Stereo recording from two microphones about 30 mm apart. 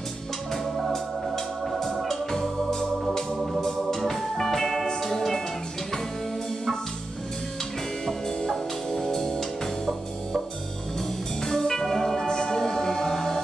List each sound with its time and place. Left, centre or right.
0.9 s music: centre
2.0 s organ: centre
4.1 s music: centre
8.0 s music: centre
11.4 s music: centre